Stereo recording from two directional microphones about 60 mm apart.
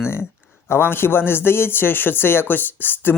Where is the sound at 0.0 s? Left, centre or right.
Left.